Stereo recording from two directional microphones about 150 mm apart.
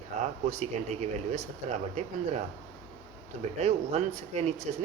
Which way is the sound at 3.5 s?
45° right (ahead or behind).